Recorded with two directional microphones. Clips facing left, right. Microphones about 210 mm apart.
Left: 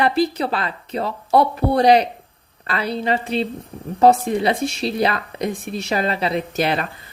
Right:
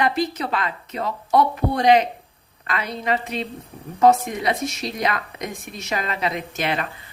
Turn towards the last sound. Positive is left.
turn(degrees=35)  # may be behind; listen again after turning